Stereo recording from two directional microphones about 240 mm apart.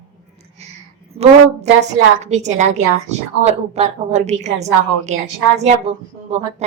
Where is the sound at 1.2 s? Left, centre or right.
Right.